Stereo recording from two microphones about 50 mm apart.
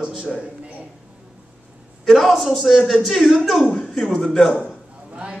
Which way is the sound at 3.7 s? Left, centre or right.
Centre.